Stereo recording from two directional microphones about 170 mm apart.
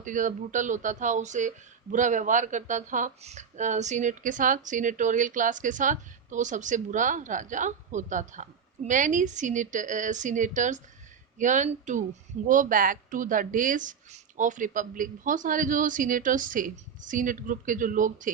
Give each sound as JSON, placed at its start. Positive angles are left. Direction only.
{"t": 0.0, "sound": "speech", "side_deg": -50}